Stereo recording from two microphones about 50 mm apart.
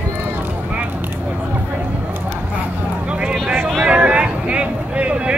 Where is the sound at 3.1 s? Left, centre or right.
Right.